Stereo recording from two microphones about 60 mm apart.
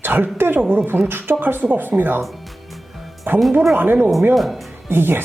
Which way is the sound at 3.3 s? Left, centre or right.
Right.